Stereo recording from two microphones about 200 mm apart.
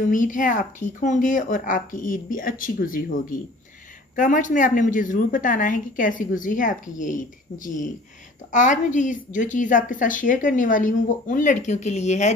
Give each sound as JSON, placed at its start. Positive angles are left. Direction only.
{"t": 0.0, "sound": "a woman's voice", "side_deg": 40}